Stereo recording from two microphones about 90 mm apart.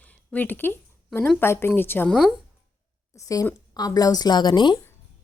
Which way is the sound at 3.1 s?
40° left (ahead or behind).